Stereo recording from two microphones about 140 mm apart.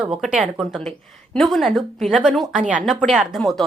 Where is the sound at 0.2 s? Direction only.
5° right (ahead or behind).